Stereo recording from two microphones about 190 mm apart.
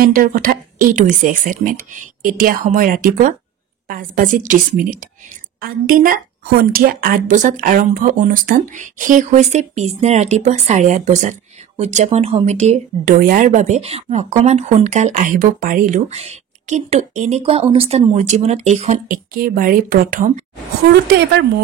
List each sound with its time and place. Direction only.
0.0 s a woman's voice: 50° right (ahead or behind)
20.9 s a woman's voice: 60° right (ahead or behind)